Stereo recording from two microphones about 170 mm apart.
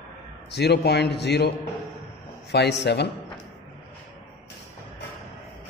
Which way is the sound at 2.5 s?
85° left.